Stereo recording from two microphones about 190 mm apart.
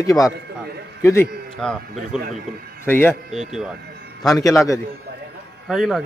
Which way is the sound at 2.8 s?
10° left (ahead or behind).